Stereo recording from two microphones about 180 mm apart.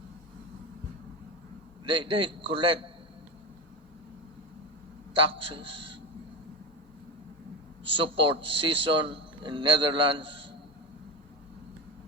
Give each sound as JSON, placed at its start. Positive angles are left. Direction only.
{"t": 1.8, "sound": "a man's voice", "side_deg": -25}
{"t": 5.1, "sound": "a man's voice", "side_deg": -30}
{"t": 7.9, "sound": "a man's voice", "side_deg": -30}